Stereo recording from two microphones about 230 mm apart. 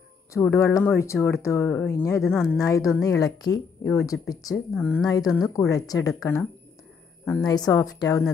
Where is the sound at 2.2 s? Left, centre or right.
Centre.